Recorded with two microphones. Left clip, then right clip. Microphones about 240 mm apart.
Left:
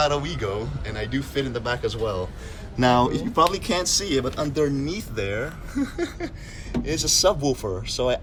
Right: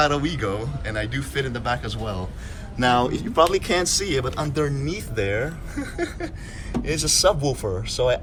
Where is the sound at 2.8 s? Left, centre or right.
Left; by 4.5 s centre.